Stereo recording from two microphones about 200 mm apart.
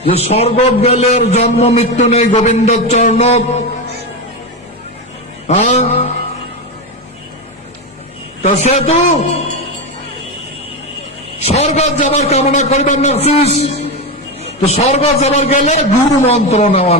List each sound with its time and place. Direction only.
0.0 s a man's voice: 30° left (ahead or behind)
5.5 s a sound: 35° left (ahead or behind)
8.4 s a man's voice: 35° left (ahead or behind)
11.4 s a man's voice: 30° left (ahead or behind)